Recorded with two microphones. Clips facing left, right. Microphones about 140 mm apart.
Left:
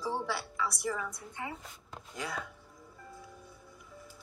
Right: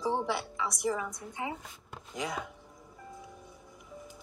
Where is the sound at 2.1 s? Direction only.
20° right (ahead or behind).